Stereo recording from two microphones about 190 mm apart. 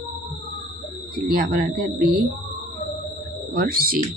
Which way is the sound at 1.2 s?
55° right (ahead or behind).